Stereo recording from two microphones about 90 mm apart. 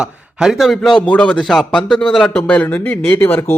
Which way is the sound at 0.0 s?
5° right (ahead or behind).